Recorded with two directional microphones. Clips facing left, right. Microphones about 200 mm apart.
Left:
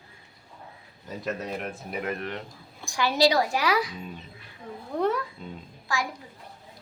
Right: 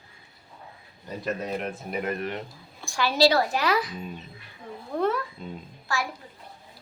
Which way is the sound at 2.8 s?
15° left (ahead or behind).